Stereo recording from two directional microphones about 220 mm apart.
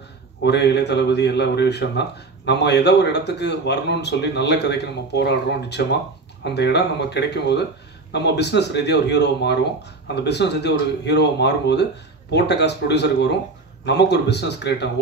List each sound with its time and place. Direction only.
0.4 s a man's voice: 50° left (ahead or behind)